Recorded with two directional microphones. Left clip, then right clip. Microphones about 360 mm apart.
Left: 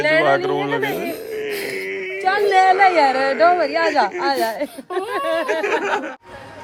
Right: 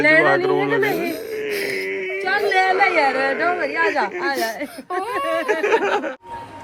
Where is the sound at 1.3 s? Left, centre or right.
Centre.